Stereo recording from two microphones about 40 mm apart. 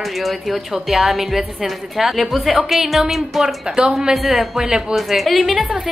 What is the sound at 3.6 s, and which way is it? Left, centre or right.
Speech, centre.